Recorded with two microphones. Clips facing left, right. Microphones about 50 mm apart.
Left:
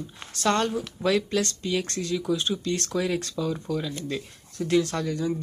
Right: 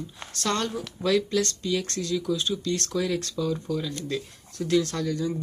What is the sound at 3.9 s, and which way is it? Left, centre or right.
Speech, centre.